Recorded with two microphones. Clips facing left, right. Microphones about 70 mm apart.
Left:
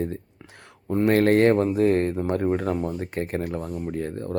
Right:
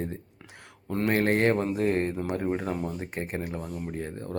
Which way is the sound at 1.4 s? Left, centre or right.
Left.